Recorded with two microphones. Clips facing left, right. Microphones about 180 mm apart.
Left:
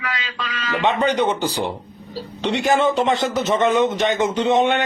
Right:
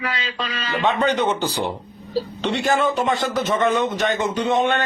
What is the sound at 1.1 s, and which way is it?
A man's voice, 10° left (ahead or behind).